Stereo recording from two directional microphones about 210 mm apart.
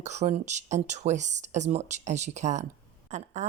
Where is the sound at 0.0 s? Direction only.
35° right (ahead or behind).